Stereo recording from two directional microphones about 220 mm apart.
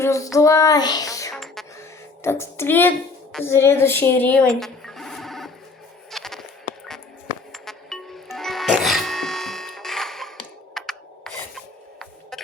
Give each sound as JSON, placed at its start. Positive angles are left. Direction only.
{"t": 0.0, "sound": "child singing", "side_deg": 15}
{"t": 0.3, "sound": "a child's voice", "side_deg": 15}
{"t": 1.3, "sound": "music", "side_deg": 0}
{"t": 2.2, "sound": "a child's voice", "side_deg": 10}
{"t": 6.1, "sound": "insect", "side_deg": 0}
{"t": 7.5, "sound": "music", "side_deg": 0}
{"t": 10.8, "sound": "filing", "side_deg": 0}